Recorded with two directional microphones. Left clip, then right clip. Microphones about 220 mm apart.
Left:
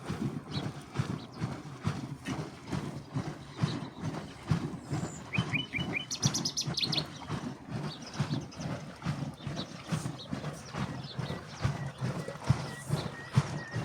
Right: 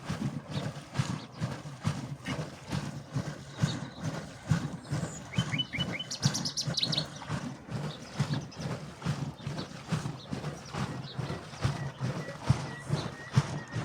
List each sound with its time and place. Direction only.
0.1 s a sound: 50° right (ahead or behind)
6.4 s bird: 50° right (ahead or behind); by 12.7 s 20° right (ahead or behind)
12.9 s horse: 15° right (ahead or behind)